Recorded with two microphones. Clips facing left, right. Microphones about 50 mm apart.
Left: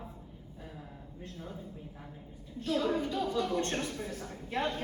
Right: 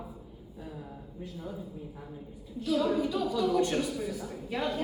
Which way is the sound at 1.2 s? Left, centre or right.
Left.